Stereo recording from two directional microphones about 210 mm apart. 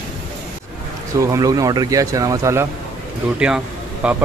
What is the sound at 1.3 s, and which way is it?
Speech, 15° right (ahead or behind).